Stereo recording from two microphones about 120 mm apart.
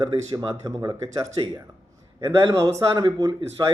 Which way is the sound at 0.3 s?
30° right (ahead or behind).